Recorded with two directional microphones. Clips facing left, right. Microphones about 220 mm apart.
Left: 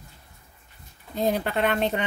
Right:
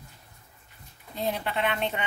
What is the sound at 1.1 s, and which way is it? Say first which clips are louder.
Speech: left 5 dB; 45° left (ahead or behind).